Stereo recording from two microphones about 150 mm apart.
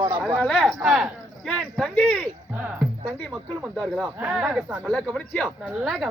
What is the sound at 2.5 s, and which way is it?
Speech, 10° right (ahead or behind).